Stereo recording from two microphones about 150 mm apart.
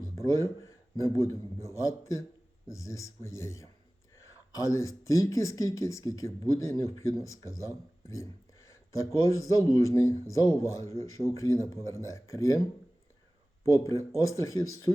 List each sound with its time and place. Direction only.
0.2 s speech: 20° left (ahead or behind)
13.7 s speech: 20° left (ahead or behind)